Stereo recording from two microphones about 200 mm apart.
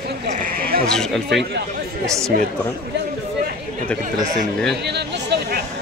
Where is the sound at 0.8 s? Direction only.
5° left (ahead or behind).